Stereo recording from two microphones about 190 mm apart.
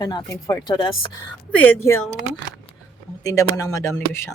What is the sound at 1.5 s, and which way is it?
Speech, 10° left (ahead or behind).